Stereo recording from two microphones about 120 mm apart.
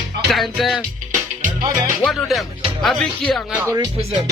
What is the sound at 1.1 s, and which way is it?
Music, 90° right.